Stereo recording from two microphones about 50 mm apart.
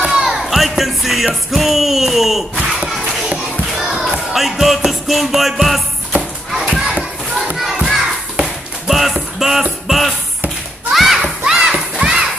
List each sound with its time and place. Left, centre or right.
0.1 s crowd: centre
3.8 s music: centre
6.1 s a sound: right
6.9 s children playing: centre
7.5 s music: centre
10.9 s children playing: centre
11.4 s a sound: centre